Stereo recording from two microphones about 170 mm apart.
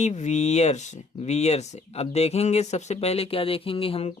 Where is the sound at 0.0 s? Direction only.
40° left (ahead or behind).